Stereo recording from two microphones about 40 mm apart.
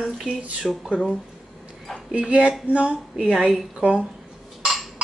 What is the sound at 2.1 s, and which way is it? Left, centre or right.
Speech, right.